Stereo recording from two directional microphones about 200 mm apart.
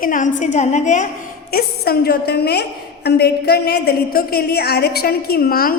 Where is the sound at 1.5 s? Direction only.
50° left (ahead or behind).